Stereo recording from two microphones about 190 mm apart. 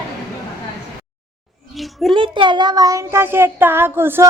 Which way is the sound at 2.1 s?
25° right (ahead or behind).